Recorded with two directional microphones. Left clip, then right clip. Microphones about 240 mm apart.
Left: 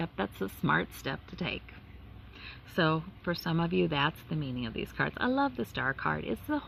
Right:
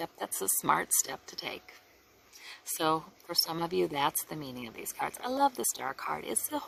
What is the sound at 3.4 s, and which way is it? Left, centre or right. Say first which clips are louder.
Speech: left 3 dB; right.